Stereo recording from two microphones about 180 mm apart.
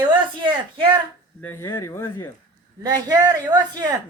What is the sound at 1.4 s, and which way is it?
Speech, 15° left (ahead or behind).